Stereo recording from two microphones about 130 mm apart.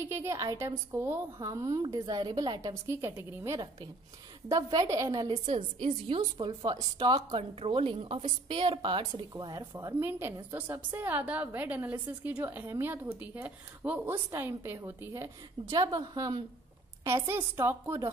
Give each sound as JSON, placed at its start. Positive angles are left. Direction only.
{"t": 0.0, "sound": "a woman's voice", "side_deg": -20}
{"t": 2.7, "sound": "a woman's voice", "side_deg": -20}
{"t": 5.5, "sound": "a woman's voice", "side_deg": -45}